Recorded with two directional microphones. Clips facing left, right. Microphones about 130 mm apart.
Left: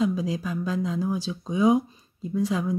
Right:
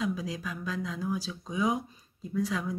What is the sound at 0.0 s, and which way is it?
Speech, 30° left (ahead or behind).